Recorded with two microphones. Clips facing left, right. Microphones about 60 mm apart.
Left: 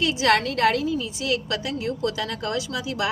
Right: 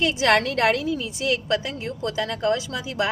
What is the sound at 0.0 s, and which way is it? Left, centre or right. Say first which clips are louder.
A woman's voice: right 1 dB; right.